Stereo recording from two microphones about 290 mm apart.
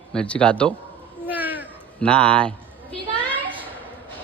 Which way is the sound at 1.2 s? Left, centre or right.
Centre.